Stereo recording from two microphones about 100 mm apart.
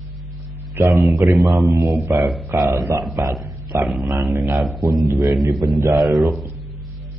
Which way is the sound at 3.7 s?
25° right (ahead or behind).